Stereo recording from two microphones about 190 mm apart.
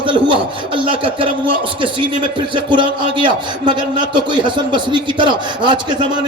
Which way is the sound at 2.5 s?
25° right (ahead or behind).